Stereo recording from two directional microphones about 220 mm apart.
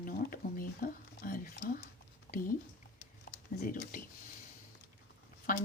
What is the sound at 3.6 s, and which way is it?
Speech, 40° left (ahead or behind).